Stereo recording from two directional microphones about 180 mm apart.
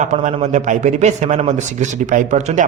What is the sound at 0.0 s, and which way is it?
A man's voice, 40° right (ahead or behind).